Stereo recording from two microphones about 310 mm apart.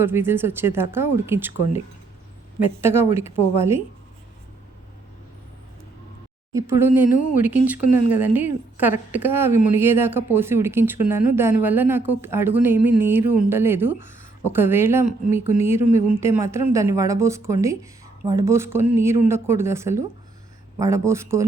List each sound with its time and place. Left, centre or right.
0.0 s speech: centre
2.8 s speech: centre
6.5 s speech: centre
7.0 s speech: left
7.3 s a woman's voice: centre
7.8 s speech: left
8.1 s a woman's voice: centre